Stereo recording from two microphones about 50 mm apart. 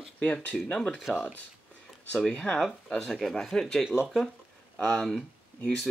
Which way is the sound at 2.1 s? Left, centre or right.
Centre.